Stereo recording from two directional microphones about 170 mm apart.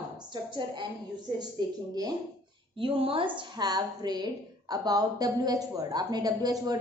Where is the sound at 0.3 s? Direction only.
25° right (ahead or behind).